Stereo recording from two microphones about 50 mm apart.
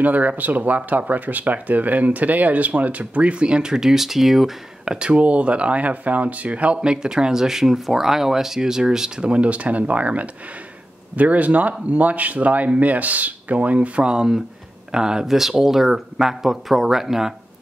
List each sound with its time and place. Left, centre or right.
0.0 s speech: right; by 4.6 s centre
4.8 s speech: centre